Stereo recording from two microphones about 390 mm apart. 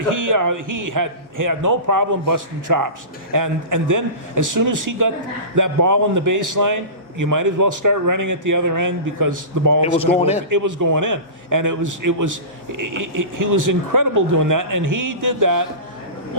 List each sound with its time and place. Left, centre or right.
0.1 s a man's voice: right
10.2 s a man's voice: centre
10.5 s a man's voice: right